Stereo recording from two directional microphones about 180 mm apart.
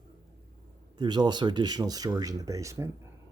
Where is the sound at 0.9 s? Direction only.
25° right (ahead or behind).